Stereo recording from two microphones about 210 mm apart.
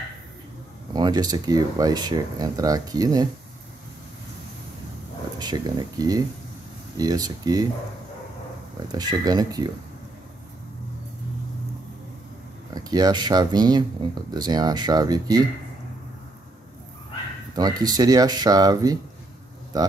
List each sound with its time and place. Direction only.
0.9 s speech: 20° right (ahead or behind)
5.4 s speech: 20° right (ahead or behind)
8.9 s speech: 20° right (ahead or behind)
12.7 s speech: 20° right (ahead or behind)
17.6 s speech: 20° right (ahead or behind)